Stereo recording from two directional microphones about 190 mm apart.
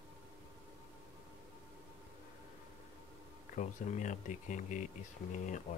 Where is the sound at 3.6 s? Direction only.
40° left (ahead or behind).